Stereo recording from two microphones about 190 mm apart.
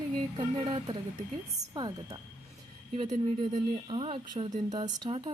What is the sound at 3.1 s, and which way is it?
Speech, 40° right (ahead or behind).